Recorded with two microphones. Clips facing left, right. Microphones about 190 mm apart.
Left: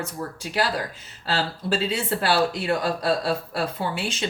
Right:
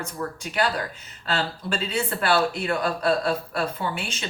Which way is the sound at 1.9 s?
35° left (ahead or behind).